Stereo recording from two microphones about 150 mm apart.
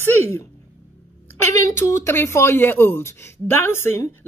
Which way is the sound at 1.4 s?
20° left (ahead or behind).